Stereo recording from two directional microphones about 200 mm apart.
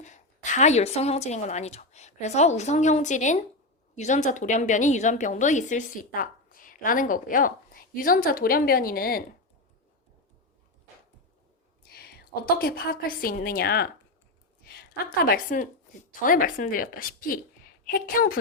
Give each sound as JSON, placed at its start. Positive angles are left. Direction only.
{"t": 0.0, "sound": "a woman's voice", "side_deg": 35}
{"t": 11.9, "sound": "a woman's voice", "side_deg": 50}